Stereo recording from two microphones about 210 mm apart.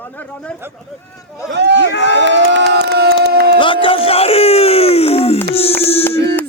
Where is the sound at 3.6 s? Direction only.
25° left (ahead or behind).